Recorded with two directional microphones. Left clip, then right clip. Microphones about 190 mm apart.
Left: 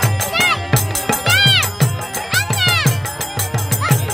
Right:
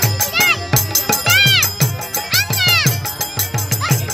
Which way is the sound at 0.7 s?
15° right (ahead or behind).